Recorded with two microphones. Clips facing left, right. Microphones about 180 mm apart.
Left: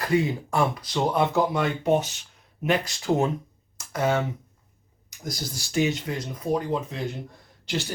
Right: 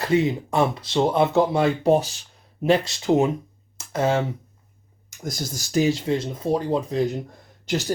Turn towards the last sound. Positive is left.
turn(degrees=-45)  # may be behind; listen again after turning